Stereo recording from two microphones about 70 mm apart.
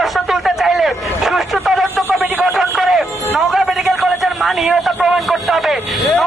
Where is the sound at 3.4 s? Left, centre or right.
Centre.